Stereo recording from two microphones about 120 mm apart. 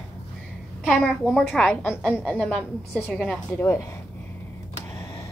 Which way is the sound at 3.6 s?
20° left (ahead or behind).